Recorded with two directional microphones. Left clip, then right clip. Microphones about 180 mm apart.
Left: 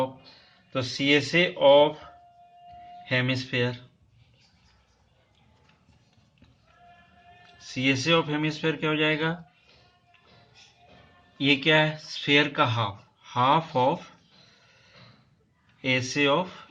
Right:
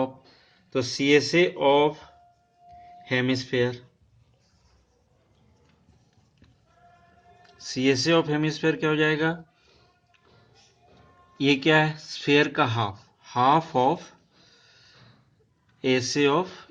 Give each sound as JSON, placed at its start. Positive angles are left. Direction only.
{"t": 0.8, "sound": "speech", "side_deg": -55}
{"t": 3.0, "sound": "speech", "side_deg": -60}
{"t": 7.6, "sound": "speech", "side_deg": -55}
{"t": 11.3, "sound": "speech", "side_deg": -55}
{"t": 15.8, "sound": "speech", "side_deg": -50}